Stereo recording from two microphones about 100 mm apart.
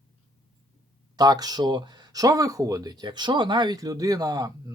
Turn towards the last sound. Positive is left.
turn(degrees=-40)  # may be behind; listen again after turning